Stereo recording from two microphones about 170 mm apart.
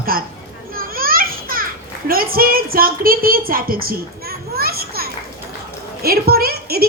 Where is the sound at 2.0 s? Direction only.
60° right (ahead or behind).